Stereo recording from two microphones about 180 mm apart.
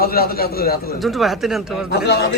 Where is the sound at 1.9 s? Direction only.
65° left (ahead or behind).